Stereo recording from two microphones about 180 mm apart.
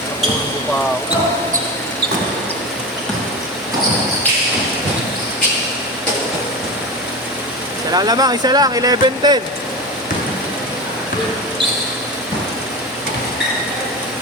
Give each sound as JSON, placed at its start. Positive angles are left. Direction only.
{"t": 7.9, "sound": "speech", "side_deg": -20}